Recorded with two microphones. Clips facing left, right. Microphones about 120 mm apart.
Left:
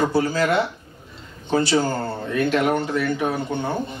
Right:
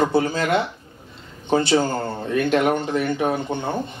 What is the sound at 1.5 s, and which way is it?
A man's voice, 25° right (ahead or behind).